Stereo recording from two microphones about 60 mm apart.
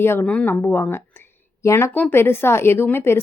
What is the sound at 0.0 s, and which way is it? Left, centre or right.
Speech, left.